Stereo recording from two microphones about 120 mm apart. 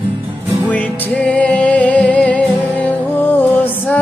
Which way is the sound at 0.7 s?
15° left (ahead or behind).